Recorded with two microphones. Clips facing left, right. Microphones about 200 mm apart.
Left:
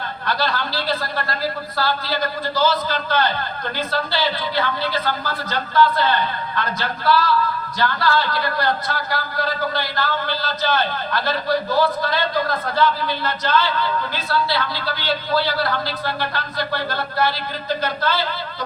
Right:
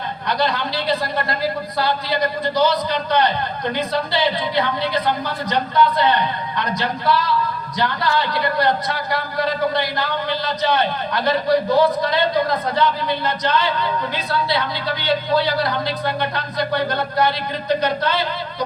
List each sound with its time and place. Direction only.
0.3 s a man's voice: 20° right (ahead or behind)